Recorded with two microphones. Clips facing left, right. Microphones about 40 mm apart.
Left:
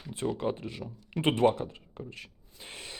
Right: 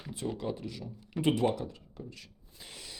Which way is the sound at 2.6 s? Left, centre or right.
Left.